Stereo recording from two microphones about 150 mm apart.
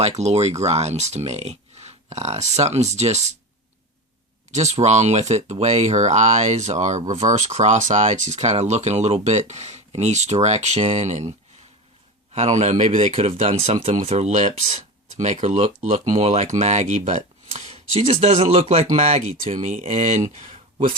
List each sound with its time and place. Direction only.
0.2 s speech: 45° right (ahead or behind)
4.5 s speech: 50° right (ahead or behind)